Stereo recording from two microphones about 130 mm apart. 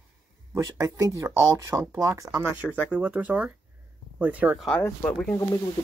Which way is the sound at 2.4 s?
10° right (ahead or behind).